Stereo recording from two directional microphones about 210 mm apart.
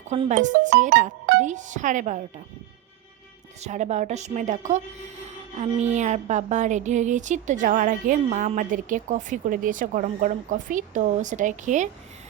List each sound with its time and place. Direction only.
0.1 s a woman's voice: 35° right (ahead or behind)
3.6 s a woman's voice: 35° right (ahead or behind)